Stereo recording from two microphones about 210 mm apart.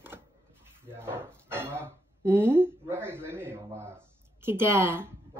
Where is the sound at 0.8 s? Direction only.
10° right (ahead or behind).